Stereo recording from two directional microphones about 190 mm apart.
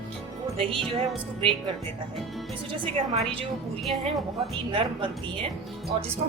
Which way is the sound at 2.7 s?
25° right (ahead or behind).